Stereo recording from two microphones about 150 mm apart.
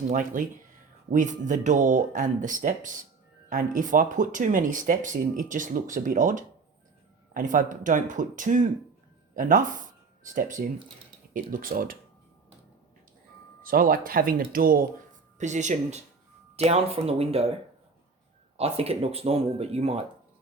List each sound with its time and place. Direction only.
0.1 s speech: 65° right (ahead or behind)
11.6 s speech: 75° right (ahead or behind)
13.6 s speech: 70° right (ahead or behind); by 17.4 s 40° right (ahead or behind)
18.5 s speech: 40° right (ahead or behind)